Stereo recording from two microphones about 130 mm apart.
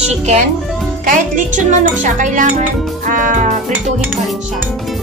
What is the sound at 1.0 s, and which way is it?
Speech, 90° right.